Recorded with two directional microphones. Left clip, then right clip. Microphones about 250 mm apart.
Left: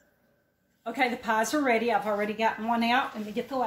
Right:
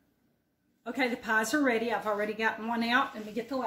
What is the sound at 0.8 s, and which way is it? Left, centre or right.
Speech, centre.